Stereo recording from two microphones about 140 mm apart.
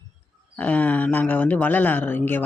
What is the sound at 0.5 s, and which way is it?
Speech, 10° left (ahead or behind).